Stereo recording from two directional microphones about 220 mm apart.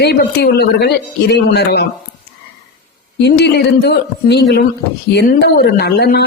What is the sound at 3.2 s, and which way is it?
Speech, 50° left (ahead or behind).